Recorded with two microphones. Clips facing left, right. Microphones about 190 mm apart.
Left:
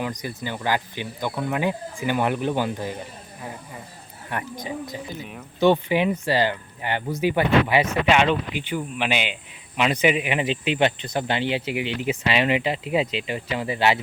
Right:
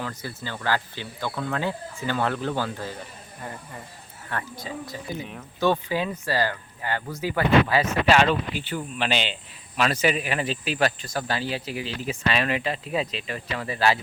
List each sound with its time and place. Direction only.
0.0 s speech: 15° left (ahead or behind)
4.3 s speech: 20° left (ahead or behind)